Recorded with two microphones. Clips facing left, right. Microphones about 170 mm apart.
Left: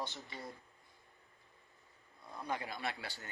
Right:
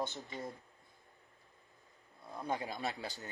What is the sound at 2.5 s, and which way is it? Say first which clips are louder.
Speech: right 2 dB; 20° right (ahead or behind).